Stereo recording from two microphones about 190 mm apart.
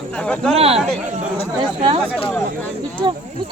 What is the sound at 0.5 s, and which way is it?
Speech, 30° right (ahead or behind).